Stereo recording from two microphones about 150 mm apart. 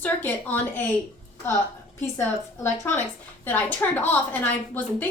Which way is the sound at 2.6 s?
15° left (ahead or behind).